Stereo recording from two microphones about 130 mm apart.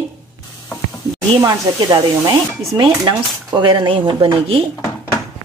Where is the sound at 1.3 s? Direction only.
35° right (ahead or behind).